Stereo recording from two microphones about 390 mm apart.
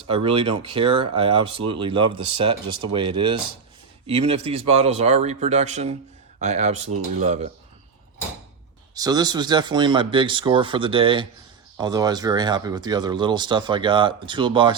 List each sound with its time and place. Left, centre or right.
0.3 s speech: centre
9.0 s speech: centre